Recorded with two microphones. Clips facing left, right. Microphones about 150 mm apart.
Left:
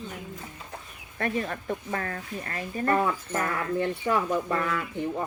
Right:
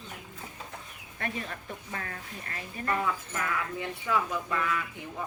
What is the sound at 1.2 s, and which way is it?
Speech, 45° left (ahead or behind).